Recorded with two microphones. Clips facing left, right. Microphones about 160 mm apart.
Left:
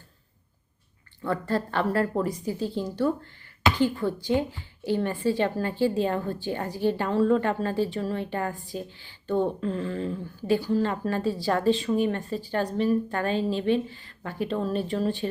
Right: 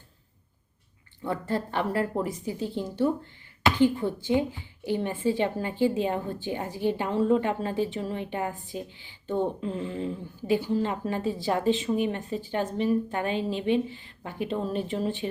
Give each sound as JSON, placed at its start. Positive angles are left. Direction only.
{"t": 1.2, "sound": "a woman's voice", "side_deg": -15}